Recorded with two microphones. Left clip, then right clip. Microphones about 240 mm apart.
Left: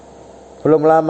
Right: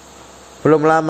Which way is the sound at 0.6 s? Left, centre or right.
Right.